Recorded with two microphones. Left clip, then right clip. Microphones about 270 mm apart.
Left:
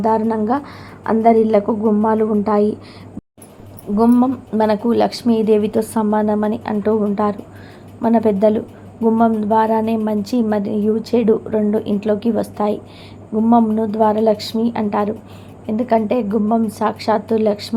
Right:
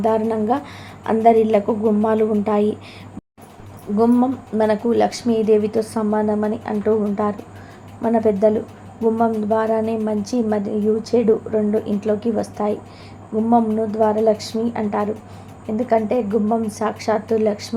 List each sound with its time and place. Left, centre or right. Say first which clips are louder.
0.0 s speech: left 2 dB; centre
3.9 s speech: left 2 dB; centre